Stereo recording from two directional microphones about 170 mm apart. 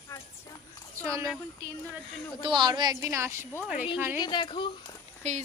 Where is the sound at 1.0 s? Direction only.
20° right (ahead or behind).